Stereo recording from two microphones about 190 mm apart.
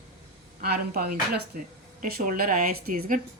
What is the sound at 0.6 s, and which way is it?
Speech, 55° right (ahead or behind).